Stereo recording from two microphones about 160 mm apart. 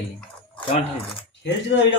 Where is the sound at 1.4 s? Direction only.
90° left.